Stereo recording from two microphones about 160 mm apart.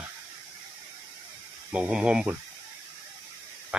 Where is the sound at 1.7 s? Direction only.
5° right (ahead or behind).